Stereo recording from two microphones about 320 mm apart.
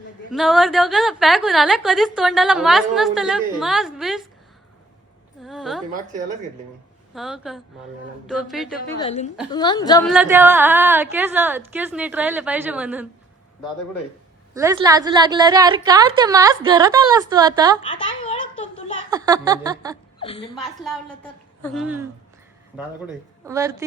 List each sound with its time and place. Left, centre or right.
0.3 s a woman's voice: centre
5.4 s a sound: centre
7.1 s a woman's voice: centre
9.0 s a woman's voice: centre
10.1 s a woman's voice: centre
14.5 s a woman's voice: centre
17.8 s a woman's voice: centre
19.1 s a woman's voice: centre
20.1 s a woman's voice: centre
20.6 s a woman's voice: centre
23.5 s a woman's voice: centre